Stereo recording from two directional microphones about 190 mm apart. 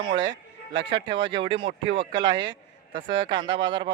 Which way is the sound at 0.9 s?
25° right (ahead or behind).